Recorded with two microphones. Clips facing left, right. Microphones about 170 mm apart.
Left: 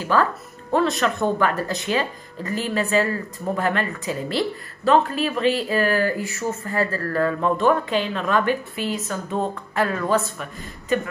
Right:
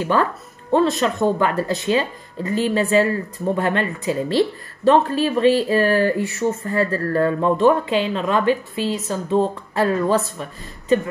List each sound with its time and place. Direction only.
0.0 s a woman's voice: 25° right (ahead or behind)